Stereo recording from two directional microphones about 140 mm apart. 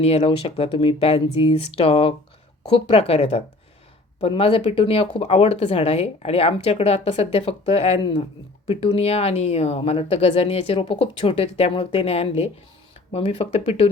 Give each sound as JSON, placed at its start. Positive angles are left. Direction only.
{"t": 0.0, "sound": "speech", "side_deg": 50}